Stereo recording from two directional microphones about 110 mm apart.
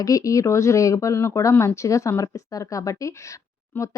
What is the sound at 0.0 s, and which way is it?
A woman's voice, 30° left (ahead or behind).